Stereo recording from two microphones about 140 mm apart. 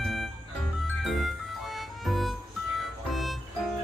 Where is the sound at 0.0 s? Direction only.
Centre (ahead or behind).